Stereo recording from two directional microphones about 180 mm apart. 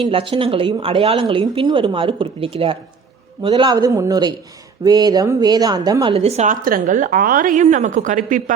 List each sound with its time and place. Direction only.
0.0 s a woman's voice: 30° right (ahead or behind)
6.1 s a woman's voice: 35° right (ahead or behind)